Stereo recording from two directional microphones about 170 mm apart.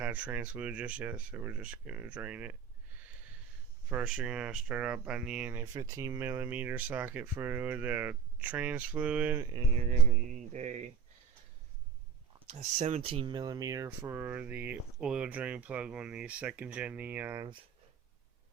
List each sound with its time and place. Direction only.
0.0 s speech: 10° right (ahead or behind)
3.8 s speech: 10° right (ahead or behind)
5.7 s speech: 20° right (ahead or behind)
9.5 s speech: 35° right (ahead or behind)
12.5 s speech: 45° right (ahead or behind); by 17.5 s 15° right (ahead or behind)